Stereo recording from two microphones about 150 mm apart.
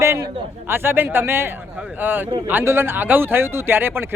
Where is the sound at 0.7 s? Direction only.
15° right (ahead or behind).